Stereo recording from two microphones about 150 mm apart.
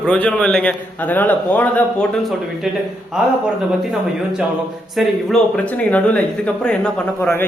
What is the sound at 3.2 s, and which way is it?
Speech, 5° right (ahead or behind).